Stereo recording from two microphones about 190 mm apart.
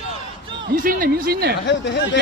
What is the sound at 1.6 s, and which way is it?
Speech, 65° left (ahead or behind).